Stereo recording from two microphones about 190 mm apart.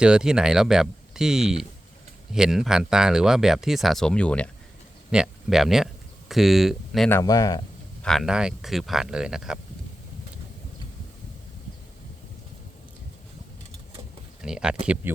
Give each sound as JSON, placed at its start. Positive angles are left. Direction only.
{"t": 0.0, "sound": "speech", "side_deg": -5}
{"t": 7.1, "sound": "speech", "side_deg": 20}
{"t": 8.0, "sound": "speech", "side_deg": 0}
{"t": 14.4, "sound": "speech", "side_deg": -5}